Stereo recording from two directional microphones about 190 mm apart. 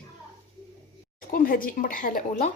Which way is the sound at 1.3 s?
50° left (ahead or behind).